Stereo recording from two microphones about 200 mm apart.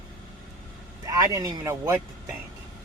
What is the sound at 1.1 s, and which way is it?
Speech, 15° right (ahead or behind).